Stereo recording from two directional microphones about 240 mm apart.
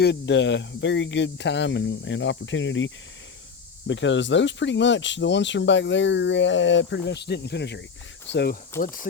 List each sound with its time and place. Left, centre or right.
0.0 s speech: left
8.7 s speech: centre